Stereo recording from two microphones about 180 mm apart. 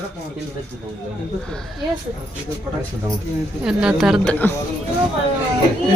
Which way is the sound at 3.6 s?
5° right (ahead or behind).